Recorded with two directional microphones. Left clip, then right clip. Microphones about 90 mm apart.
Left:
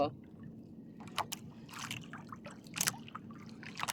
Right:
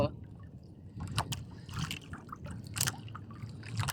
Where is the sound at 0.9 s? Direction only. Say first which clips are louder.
Right 1 dB; 30° right (ahead or behind).